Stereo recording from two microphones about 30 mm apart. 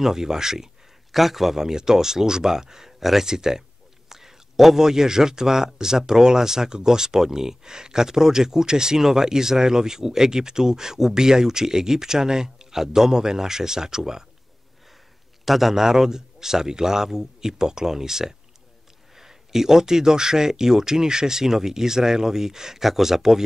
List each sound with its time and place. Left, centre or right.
0.0 s speech: centre
1.1 s speech: centre
3.0 s speech: centre
3.3 s speech: centre
15.4 s a man's voice: centre
15.8 s speech: centre